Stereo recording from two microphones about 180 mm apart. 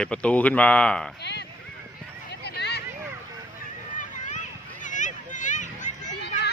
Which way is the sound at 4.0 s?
45° left (ahead or behind).